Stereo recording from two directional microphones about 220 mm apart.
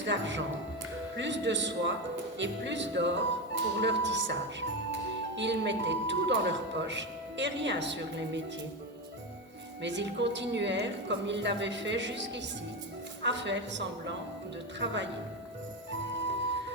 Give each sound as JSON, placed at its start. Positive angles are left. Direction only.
{"t": 0.0, "sound": "a man's voice", "side_deg": -55}
{"t": 9.8, "sound": "speech", "side_deg": -55}